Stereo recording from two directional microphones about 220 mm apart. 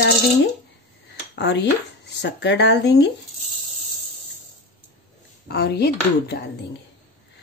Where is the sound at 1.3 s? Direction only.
50° left (ahead or behind).